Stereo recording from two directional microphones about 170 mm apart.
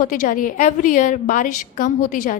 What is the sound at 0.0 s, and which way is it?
A woman's voice, 55° left (ahead or behind).